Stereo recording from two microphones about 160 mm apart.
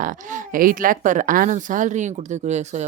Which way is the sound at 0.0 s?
55° right (ahead or behind).